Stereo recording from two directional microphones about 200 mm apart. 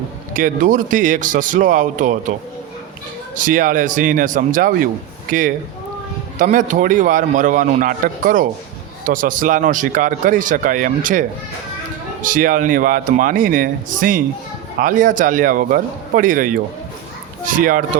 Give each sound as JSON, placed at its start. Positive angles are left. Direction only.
{"t": 0.3, "sound": "speech", "side_deg": -40}
{"t": 3.3, "sound": "a man's voice", "side_deg": -40}